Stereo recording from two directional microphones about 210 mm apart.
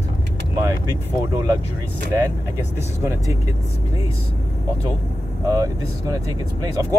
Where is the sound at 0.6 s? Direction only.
15° right (ahead or behind).